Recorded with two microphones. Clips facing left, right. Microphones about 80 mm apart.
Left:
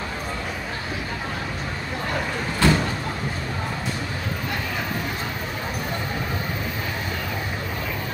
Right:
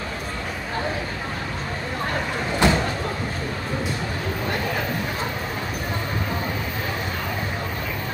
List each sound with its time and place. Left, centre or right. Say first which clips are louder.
2.6 s vehicle: even; right